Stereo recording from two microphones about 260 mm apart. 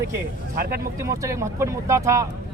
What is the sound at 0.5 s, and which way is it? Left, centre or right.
Speech, right.